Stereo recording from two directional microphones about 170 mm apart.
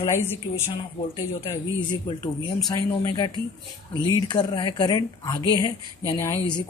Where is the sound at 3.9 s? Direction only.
25° left (ahead or behind).